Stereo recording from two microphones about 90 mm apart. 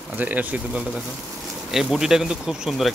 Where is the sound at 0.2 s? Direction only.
15° right (ahead or behind).